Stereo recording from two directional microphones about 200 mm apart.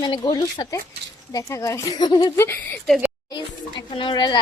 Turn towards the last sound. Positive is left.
turn(degrees=20)  # may be behind; listen again after turning